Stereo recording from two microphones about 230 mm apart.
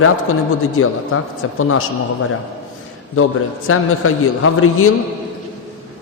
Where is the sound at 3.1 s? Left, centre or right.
Left.